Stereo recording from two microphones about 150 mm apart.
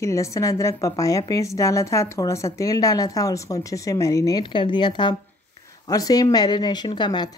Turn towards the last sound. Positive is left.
turn(degrees=30)  # may be behind; listen again after turning